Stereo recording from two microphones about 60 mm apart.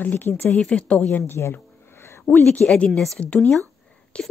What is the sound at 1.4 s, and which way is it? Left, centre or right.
Speech, left.